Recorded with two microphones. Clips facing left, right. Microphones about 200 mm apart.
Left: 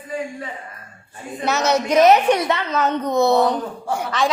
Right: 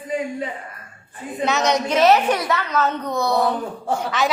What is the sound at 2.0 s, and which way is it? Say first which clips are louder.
A child's voice: right 1 dB; 20° left (ahead or behind).